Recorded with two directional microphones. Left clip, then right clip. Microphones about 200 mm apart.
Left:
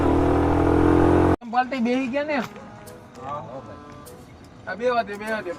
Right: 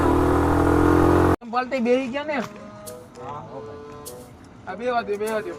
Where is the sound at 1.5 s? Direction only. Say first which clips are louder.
Right 1 dB; 5° left (ahead or behind).